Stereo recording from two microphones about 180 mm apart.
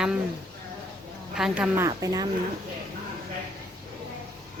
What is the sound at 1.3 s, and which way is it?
Speech, 5° right (ahead or behind).